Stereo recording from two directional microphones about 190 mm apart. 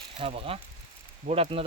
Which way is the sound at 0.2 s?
30° right (ahead or behind).